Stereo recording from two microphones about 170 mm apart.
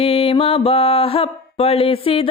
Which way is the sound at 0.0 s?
35° left (ahead or behind).